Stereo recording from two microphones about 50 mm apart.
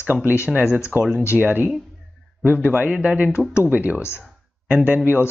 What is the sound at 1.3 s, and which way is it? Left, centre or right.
Speech, right.